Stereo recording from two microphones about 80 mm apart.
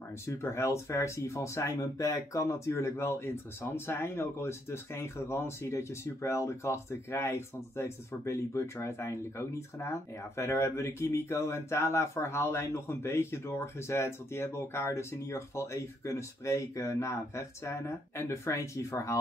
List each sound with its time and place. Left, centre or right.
0.4 s speech: left